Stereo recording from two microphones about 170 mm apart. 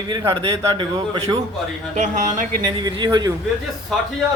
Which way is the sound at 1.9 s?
45° right (ahead or behind).